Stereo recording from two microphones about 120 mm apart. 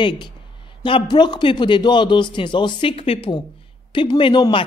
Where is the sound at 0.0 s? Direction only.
40° left (ahead or behind).